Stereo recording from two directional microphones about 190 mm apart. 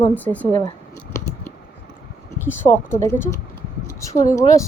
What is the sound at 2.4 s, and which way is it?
A woman's voice, 10° left (ahead or behind).